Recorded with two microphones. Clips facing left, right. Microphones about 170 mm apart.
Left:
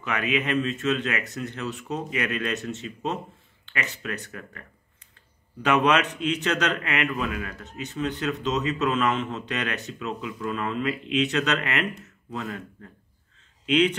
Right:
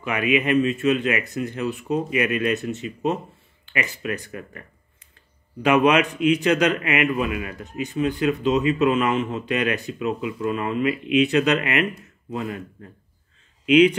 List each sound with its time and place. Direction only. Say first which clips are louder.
0.0 s a man's voice: right 5 dB; 10° right (ahead or behind)
13.7 s a man's voice: right 7 dB; 10° right (ahead or behind)